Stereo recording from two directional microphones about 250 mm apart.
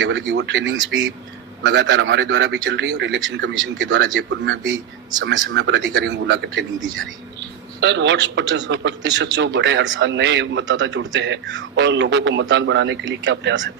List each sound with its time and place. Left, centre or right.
0.0 s a man's voice: right
7.8 s a man's voice: right